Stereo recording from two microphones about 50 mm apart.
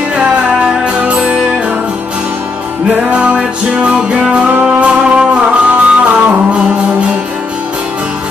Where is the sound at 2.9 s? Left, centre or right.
Right.